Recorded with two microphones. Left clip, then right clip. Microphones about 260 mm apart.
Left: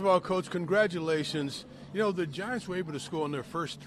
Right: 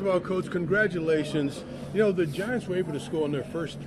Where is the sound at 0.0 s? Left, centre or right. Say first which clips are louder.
Even; left.